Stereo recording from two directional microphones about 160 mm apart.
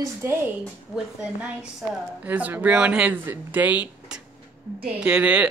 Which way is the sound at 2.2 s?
10° right (ahead or behind).